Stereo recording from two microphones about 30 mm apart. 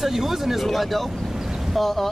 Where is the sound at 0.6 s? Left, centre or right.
Centre.